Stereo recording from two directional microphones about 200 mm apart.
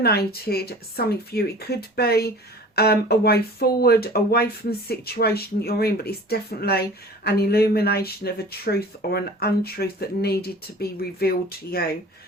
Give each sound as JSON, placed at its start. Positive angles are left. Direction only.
{"t": 0.0, "sound": "speech", "side_deg": 50}